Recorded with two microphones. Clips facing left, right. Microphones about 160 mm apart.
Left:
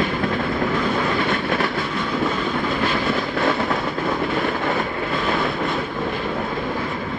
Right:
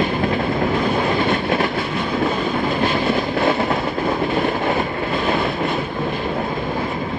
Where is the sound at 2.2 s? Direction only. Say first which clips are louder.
Right 3 dB; 20° right (ahead or behind).